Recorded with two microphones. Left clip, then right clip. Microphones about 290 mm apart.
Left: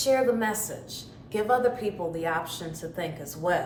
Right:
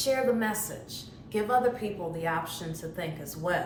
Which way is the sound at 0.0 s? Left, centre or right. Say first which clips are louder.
Left 3 dB; centre.